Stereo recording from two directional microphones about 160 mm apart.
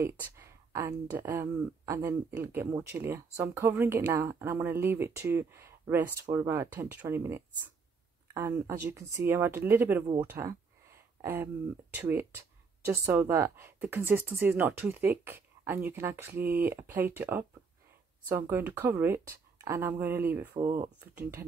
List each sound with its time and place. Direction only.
0.0 s speech: 15° right (ahead or behind)
21.0 s speech: 10° right (ahead or behind)